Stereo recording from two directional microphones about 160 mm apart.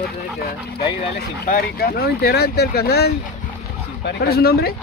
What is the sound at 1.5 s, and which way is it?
Speech, 75° left (ahead or behind).